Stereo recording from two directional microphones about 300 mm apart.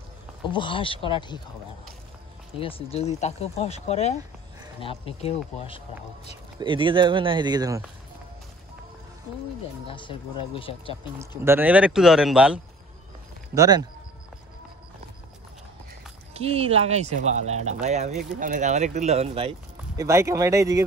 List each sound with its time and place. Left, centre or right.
0.5 s speech: centre
2.6 s speech: centre
6.6 s speech: centre
9.8 s speech: centre
11.1 s speech: centre
13.6 s speech: centre
16.3 s speech: centre
20.0 s speech: centre